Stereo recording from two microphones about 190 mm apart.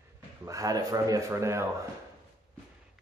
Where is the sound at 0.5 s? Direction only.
20° right (ahead or behind).